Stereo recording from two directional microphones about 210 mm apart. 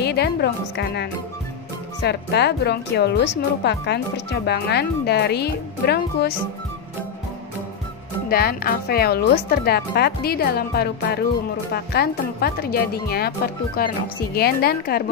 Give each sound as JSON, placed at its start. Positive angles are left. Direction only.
{"t": 0.0, "sound": "a woman's voice", "side_deg": 50}
{"t": 8.3, "sound": "a woman's voice", "side_deg": 45}